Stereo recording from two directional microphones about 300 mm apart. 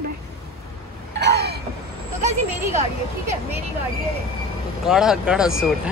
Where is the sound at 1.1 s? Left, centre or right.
Right.